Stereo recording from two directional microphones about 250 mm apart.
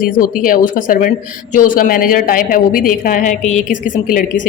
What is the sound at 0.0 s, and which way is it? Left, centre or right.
A woman's voice, left.